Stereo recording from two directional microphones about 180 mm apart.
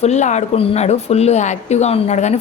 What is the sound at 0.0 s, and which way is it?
Speech, 40° left (ahead or behind).